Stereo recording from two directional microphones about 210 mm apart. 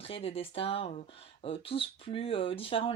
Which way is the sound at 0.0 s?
25° left (ahead or behind).